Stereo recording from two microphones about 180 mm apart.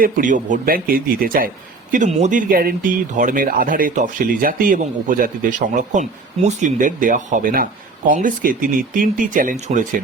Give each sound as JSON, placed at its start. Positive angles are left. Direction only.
{"t": 0.0, "sound": "speech", "side_deg": -45}
{"t": 1.9, "sound": "speech", "side_deg": -40}